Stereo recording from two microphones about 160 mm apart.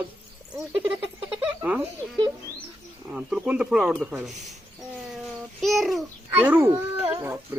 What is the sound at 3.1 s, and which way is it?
Speech, 5° right (ahead or behind).